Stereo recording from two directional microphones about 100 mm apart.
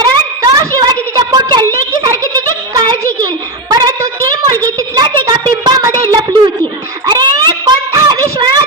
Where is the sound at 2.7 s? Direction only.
40° right (ahead or behind).